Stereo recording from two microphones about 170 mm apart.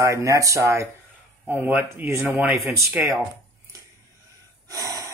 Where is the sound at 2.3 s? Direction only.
5° right (ahead or behind).